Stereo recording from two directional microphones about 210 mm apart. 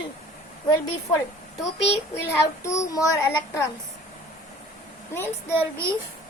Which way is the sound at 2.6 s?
15° left (ahead or behind).